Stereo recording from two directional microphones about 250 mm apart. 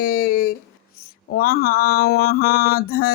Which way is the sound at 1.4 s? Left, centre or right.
Left.